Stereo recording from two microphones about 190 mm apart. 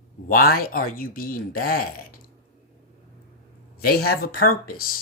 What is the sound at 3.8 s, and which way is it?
Speech, 55° left (ahead or behind).